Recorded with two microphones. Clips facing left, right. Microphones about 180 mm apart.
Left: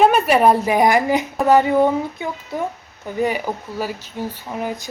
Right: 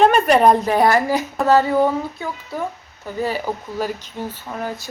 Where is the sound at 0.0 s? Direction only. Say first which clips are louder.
Right 1 dB; 5° left (ahead or behind).